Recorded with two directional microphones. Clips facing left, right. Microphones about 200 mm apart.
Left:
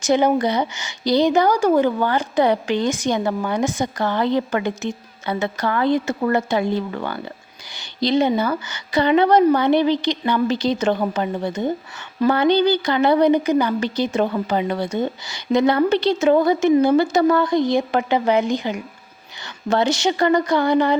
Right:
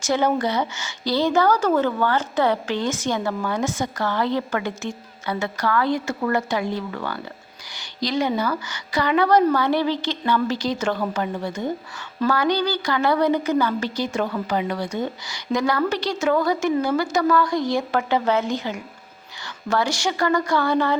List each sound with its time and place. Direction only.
0.0 s speech: 15° left (ahead or behind)